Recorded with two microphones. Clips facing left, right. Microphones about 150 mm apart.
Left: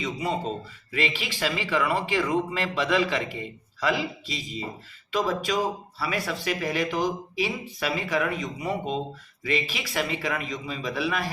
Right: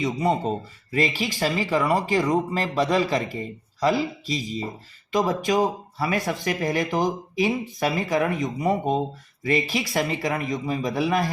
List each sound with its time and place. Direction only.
0.9 s speech: 40° right (ahead or behind)